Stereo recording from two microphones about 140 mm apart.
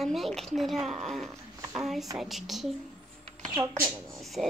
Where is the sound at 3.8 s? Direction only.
15° right (ahead or behind).